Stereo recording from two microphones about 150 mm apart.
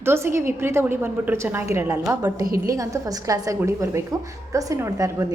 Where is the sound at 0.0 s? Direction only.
15° right (ahead or behind).